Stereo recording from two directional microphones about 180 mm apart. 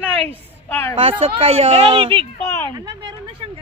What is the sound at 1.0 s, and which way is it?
A woman's voice, 30° right (ahead or behind).